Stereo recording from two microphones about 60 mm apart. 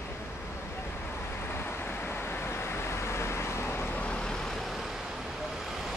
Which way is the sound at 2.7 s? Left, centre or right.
Left.